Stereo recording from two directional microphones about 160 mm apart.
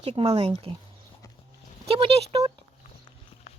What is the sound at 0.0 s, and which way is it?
Speech, 40° right (ahead or behind).